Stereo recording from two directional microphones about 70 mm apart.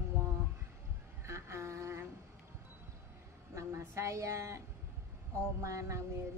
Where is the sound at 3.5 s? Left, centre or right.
Right.